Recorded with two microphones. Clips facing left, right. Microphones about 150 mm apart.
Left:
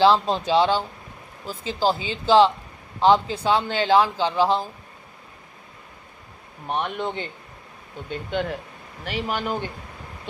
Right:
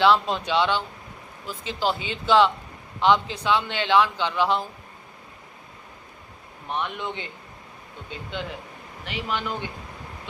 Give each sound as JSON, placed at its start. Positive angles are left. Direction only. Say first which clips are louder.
{"t": 0.0, "sound": "a man's voice", "louder": "left 2 dB", "side_deg": 35}
{"t": 6.7, "sound": "a man's voice", "louder": "left 3 dB", "side_deg": 45}
{"t": 8.3, "sound": "a man's voice", "louder": "left 7 dB", "side_deg": 55}